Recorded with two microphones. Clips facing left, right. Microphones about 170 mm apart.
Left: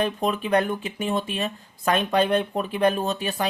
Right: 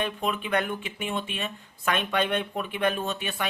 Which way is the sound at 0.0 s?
40° left (ahead or behind).